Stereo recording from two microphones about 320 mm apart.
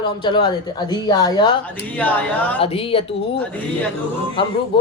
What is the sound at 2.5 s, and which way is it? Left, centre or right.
A man's voice, centre.